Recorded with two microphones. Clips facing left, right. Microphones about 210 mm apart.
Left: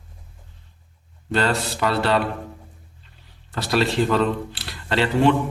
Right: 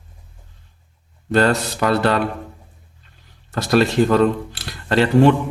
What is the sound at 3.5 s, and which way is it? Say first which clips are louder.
Speech: right 5 dB; 45° right (ahead or behind).